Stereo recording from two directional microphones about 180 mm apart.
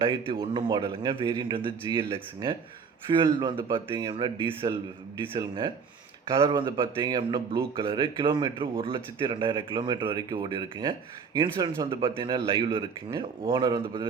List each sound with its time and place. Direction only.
0.0 s speech: 30° right (ahead or behind)